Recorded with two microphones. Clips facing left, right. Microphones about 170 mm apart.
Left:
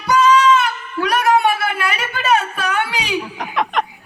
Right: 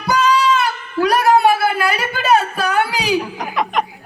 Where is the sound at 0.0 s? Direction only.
35° right (ahead or behind).